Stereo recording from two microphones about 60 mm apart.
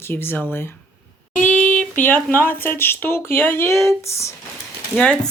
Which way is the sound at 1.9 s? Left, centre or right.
Left.